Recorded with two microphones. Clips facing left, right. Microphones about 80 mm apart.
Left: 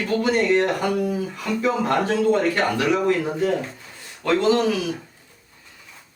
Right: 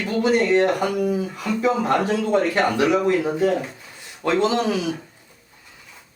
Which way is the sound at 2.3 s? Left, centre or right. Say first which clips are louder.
Right 1 dB; centre.